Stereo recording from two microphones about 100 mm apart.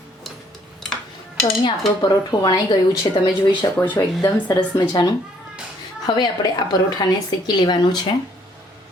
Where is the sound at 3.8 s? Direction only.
20° left (ahead or behind).